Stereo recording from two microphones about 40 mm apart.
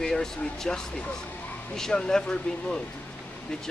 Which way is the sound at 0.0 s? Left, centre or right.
Centre.